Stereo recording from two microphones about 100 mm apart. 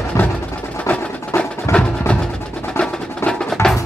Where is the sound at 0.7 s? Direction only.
15° left (ahead or behind).